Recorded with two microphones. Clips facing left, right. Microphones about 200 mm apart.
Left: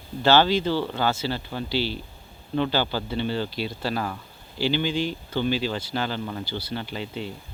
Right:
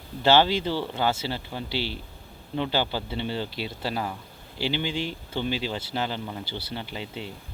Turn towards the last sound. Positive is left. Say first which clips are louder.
# left 3 dB
turn(degrees=-20)  # may be behind; listen again after turning